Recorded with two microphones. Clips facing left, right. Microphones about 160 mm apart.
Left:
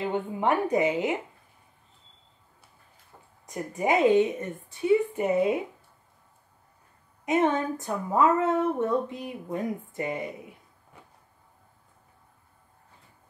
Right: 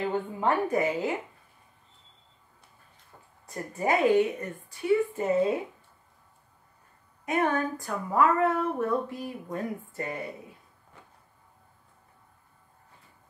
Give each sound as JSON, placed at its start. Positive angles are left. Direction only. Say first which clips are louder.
{"t": 0.0, "sound": "speech", "louder": "left 1 dB", "side_deg": 20}
{"t": 3.4, "sound": "speech", "louder": "left 2 dB", "side_deg": 15}
{"t": 7.2, "sound": "speech", "louder": "left 3 dB", "side_deg": 25}